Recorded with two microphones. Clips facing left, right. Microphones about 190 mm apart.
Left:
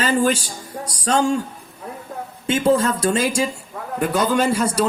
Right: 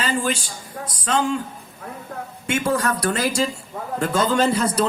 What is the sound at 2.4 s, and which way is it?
Speech, 30° left (ahead or behind).